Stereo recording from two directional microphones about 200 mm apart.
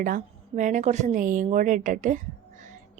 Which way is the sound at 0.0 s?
40° right (ahead or behind).